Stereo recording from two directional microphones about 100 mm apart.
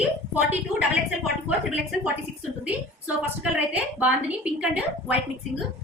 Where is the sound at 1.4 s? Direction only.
10° right (ahead or behind).